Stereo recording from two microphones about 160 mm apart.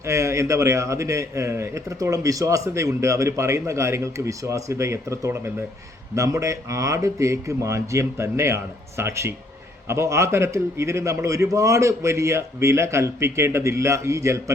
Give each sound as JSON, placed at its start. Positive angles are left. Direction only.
{"t": 0.1, "sound": "a man's voice", "side_deg": -20}